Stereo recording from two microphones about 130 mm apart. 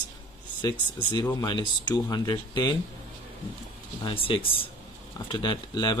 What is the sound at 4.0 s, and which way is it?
Speech, 45° left (ahead or behind).